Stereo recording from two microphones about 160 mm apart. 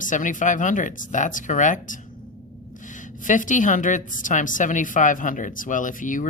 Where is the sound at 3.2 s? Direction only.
55° left (ahead or behind).